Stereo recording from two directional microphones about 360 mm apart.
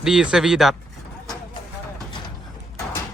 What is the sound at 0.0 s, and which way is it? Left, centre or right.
Speech, centre.